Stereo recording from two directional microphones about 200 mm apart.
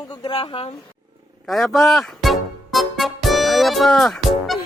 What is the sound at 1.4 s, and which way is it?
Music, centre (ahead or behind).